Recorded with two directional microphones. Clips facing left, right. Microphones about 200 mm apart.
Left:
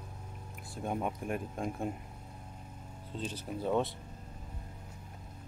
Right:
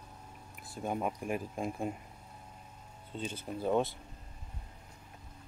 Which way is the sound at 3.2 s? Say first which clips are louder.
Even; centre (ahead or behind).